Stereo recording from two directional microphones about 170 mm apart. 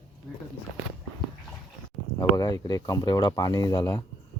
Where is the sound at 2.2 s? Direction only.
20° left (ahead or behind).